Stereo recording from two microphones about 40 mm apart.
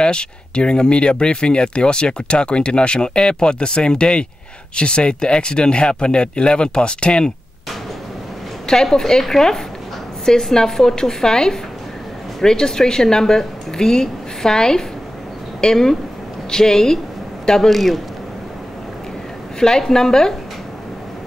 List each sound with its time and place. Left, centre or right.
0.0 s speech: left
8.8 s a woman's voice: centre
19.6 s a woman's voice: centre